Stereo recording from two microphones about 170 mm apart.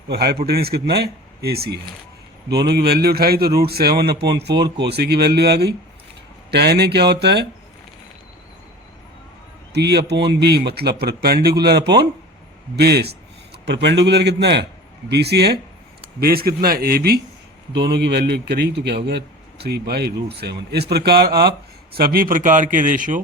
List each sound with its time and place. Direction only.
0.1 s a man's voice: 70° right (ahead or behind)
9.7 s a man's voice: 80° right
13.7 s a man's voice: 90° right; by 15.5 s 75° right (ahead or behind)
16.2 s a man's voice: 65° right (ahead or behind)
17.7 s a man's voice: 80° right; by 23.2 s 50° right (ahead or behind)